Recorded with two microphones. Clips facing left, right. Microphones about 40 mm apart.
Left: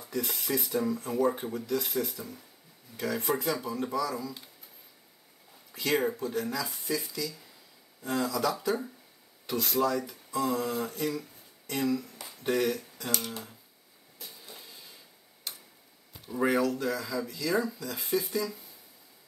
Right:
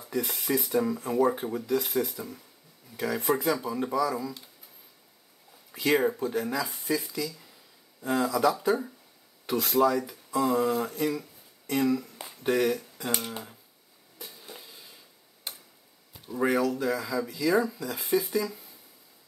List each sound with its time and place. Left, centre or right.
0.0 s speech: centre
5.7 s speech: centre
12.9 s speech: centre
14.6 s a sound: centre
15.5 s tick-tock: right
16.1 s speech: centre